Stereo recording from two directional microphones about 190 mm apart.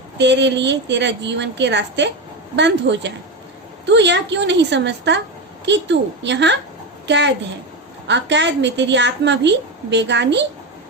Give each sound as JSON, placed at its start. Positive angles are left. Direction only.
{"t": 0.2, "sound": "a woman's voice", "side_deg": -70}